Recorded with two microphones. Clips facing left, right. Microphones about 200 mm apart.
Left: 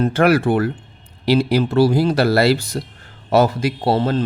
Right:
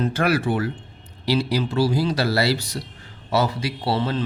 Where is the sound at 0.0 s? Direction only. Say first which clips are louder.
Left 6 dB; 55° left (ahead or behind).